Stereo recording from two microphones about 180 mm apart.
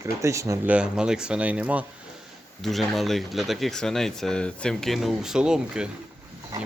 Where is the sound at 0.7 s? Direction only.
5° right (ahead or behind).